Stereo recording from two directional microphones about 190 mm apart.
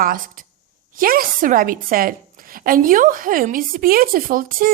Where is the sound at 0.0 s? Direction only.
45° right (ahead or behind).